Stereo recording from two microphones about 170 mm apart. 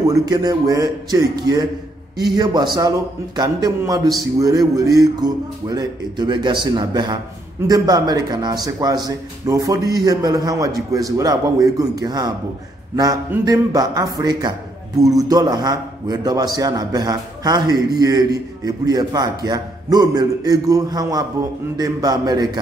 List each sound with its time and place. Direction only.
0.1 s speech: 25° right (ahead or behind)